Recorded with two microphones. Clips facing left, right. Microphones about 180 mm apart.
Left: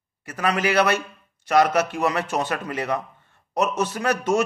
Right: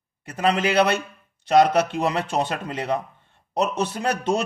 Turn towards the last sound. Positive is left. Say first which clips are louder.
# left 1 dB
turn(degrees=-30)  # may be behind; listen again after turning